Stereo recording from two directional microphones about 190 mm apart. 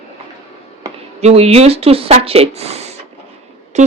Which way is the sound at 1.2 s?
35° right (ahead or behind).